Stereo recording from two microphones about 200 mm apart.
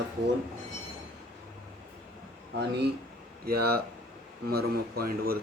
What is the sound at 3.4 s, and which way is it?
Speech, 50° right (ahead or behind).